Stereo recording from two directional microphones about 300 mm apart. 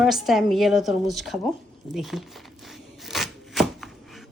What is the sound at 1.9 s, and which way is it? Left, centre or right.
Chopping, centre.